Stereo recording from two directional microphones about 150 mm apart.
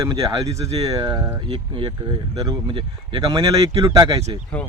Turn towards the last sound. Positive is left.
turn(degrees=-25)  # may be behind; listen again after turning